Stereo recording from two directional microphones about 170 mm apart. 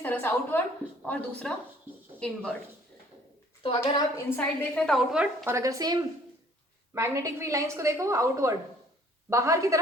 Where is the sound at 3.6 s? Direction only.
30° left (ahead or behind).